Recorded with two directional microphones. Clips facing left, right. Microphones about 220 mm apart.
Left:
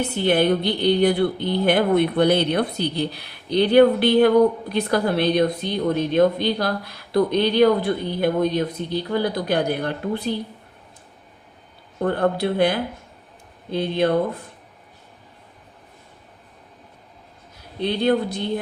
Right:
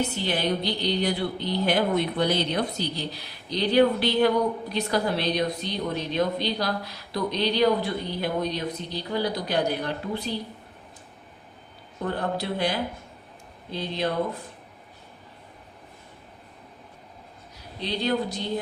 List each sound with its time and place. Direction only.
0.2 s a woman's voice: 55° left (ahead or behind)
12.0 s a woman's voice: 55° left (ahead or behind)
17.7 s a woman's voice: 55° left (ahead or behind)